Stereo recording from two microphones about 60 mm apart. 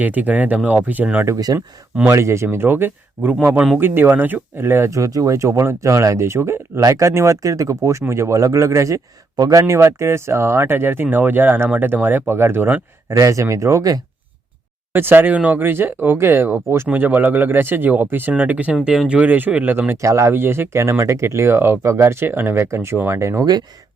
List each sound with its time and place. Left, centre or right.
0.0 s speech: right
1.5 s speech: right
2.0 s speech: right
4.9 s speech: right
6.8 s speech: right
7.4 s speech: right
8.0 s speech: right
13.1 s speech: right
14.9 s speech: right
16.9 s speech: right
20.0 s speech: right
20.3 s speech: right